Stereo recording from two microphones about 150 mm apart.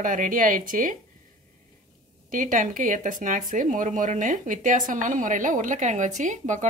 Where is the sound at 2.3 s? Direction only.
60° right (ahead or behind).